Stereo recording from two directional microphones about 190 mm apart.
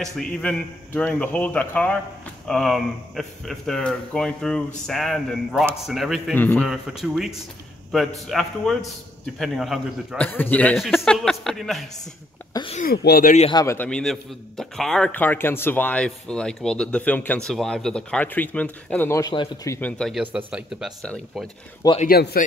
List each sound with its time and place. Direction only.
0.0 s a man's voice: 5° left (ahead or behind)
6.7 s a man's voice: centre (ahead or behind)
12.7 s speech: 50° left (ahead or behind)
13.5 s a man's voice: 20° left (ahead or behind)
13.7 s a man's voice: 5° left (ahead or behind)
22.0 s speech: 55° left (ahead or behind)